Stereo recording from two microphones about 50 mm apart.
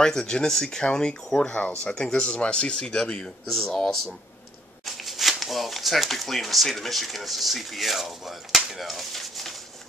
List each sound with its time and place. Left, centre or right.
0.0 s speech: centre
4.8 s speech: centre